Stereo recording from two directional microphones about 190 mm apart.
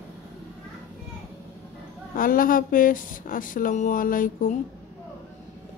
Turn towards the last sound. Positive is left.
turn(degrees=45)  # may be behind; listen again after turning